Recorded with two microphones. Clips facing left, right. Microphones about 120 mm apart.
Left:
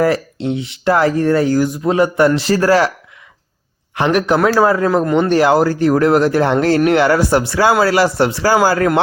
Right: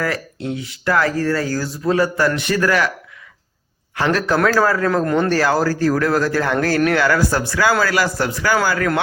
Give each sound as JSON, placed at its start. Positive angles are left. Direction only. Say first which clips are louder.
{"t": 0.0, "sound": "speech", "louder": "left 8 dB", "side_deg": 25}
{"t": 3.9, "sound": "speech", "louder": "left 4 dB", "side_deg": 20}